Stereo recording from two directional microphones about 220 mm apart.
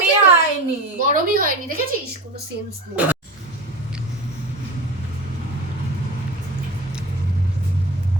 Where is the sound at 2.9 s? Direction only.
5° right (ahead or behind).